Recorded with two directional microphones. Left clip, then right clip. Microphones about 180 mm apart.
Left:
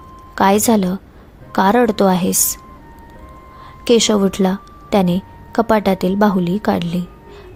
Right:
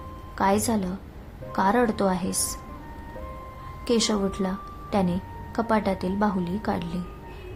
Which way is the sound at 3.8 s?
40° left (ahead or behind).